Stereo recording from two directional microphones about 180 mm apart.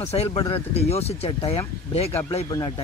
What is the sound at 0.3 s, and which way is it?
Speech, 25° left (ahead or behind).